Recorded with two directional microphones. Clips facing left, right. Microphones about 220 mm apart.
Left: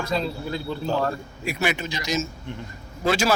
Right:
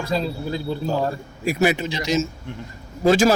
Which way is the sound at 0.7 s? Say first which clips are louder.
Right 1 dB; 10° right (ahead or behind).